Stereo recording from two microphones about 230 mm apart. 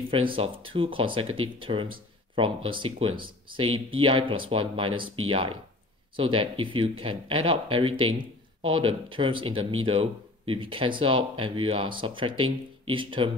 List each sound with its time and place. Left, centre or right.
0.4 s speech: right